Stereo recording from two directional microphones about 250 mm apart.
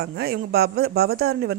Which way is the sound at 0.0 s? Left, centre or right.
Right.